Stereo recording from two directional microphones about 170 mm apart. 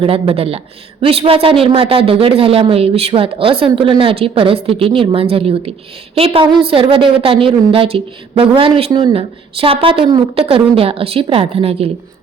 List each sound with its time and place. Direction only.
0.0 s a woman's voice: 35° right (ahead or behind)